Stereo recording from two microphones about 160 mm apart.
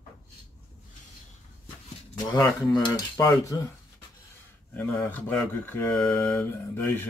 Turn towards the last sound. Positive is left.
turn(degrees=15)  # may be behind; listen again after turning